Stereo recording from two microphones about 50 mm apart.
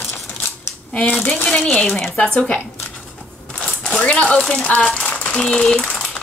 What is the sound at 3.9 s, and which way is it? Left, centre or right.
Speech, left.